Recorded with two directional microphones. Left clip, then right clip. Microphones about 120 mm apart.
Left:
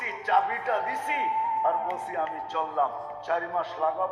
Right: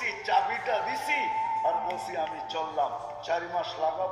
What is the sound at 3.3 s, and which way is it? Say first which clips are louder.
Speech: left 2 dB; 25° right (ahead or behind).